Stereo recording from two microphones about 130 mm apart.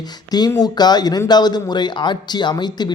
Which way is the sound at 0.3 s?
30° left (ahead or behind).